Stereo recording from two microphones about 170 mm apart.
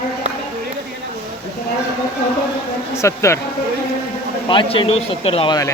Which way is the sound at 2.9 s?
15° left (ahead or behind).